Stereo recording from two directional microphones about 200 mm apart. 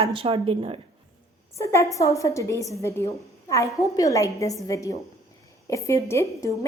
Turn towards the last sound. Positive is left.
turn(degrees=15)  # may be behind; listen again after turning